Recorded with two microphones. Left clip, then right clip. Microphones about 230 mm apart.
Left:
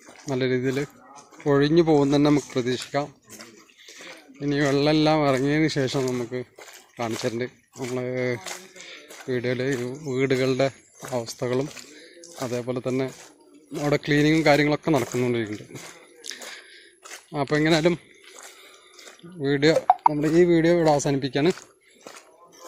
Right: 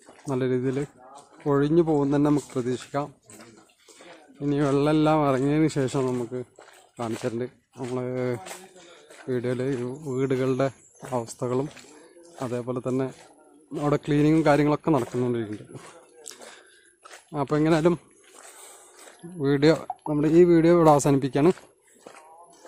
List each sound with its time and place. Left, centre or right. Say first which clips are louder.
0.3 s speech: left 1 dB; centre
4.4 s speech: left 1 dB; centre
14.9 s speech: left 2 dB; centre
16.3 s a sound: left 9 dB; centre
17.3 s speech: left 1 dB; centre
19.4 s speech: left 1 dB; right